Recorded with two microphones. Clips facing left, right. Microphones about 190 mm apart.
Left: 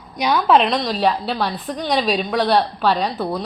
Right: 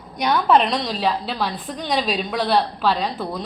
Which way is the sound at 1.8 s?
45° left (ahead or behind).